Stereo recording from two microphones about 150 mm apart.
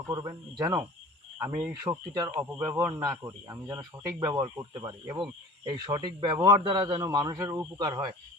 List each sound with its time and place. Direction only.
0.1 s speech: 25° right (ahead or behind)